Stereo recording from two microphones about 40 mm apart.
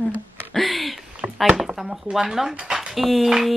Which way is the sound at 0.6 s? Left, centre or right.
Centre.